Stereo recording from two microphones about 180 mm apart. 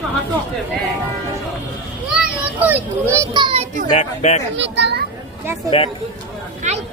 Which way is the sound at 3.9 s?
40° left (ahead or behind).